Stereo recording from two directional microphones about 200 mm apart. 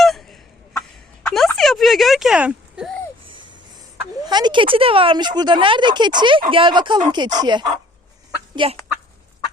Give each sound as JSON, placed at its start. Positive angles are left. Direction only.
{"t": 0.0, "sound": "chicken", "side_deg": 0}
{"t": 1.3, "sound": "a sound", "side_deg": 0}
{"t": 4.3, "sound": "speech", "side_deg": -20}
{"t": 8.6, "sound": "speech", "side_deg": -25}